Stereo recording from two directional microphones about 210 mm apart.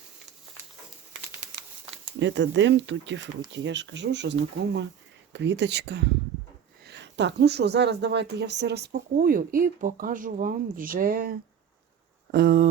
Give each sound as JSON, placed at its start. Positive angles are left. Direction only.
{"t": 2.1, "sound": "speech", "side_deg": -60}